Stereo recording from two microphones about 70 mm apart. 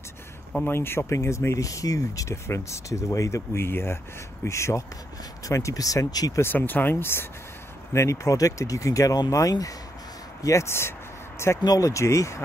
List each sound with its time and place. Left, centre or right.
0.7 s speech: left
6.4 s speech: left
7.9 s speech: left
10.4 s speech: left
11.6 s speech: left